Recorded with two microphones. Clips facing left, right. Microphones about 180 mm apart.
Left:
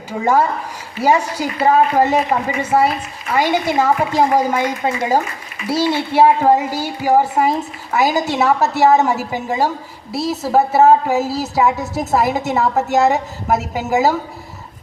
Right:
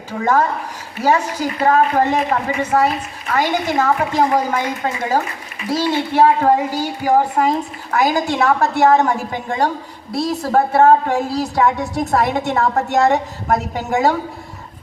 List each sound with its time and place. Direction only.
0.1 s a woman's voice: 10° left (ahead or behind)
5.6 s a woman's voice: 10° left (ahead or behind)